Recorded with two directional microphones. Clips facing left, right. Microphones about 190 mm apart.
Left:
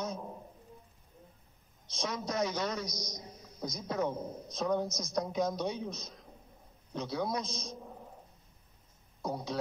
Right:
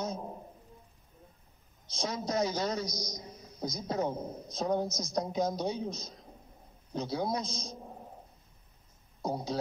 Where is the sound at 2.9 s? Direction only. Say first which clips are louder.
Right 3 dB; 90° right.